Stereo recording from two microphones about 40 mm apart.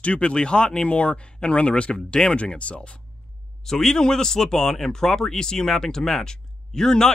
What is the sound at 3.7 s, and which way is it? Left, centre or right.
Speech, centre.